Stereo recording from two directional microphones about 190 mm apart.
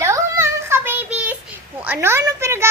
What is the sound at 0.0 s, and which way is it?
Child singing, 15° right (ahead or behind).